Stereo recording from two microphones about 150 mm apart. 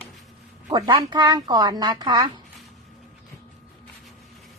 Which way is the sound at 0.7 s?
25° right (ahead or behind).